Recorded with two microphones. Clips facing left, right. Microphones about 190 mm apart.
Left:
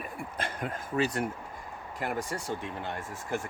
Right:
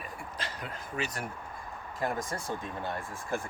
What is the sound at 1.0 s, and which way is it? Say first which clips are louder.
Speech: left 8 dB; 25° left (ahead or behind).